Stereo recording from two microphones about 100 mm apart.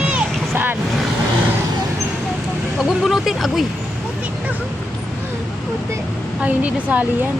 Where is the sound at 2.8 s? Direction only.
5° right (ahead or behind).